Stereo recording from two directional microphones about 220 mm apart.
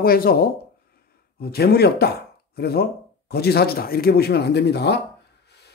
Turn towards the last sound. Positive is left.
turn(degrees=50)  # may be behind; listen again after turning